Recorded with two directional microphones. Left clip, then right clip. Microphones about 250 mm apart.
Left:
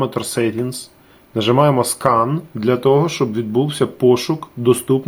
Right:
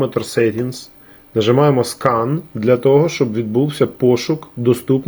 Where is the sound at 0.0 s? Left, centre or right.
Centre.